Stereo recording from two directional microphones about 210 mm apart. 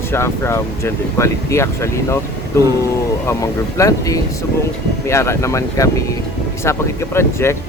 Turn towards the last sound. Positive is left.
turn(degrees=10)  # may be behind; listen again after turning